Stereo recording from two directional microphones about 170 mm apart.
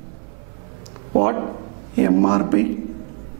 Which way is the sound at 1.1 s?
10° right (ahead or behind).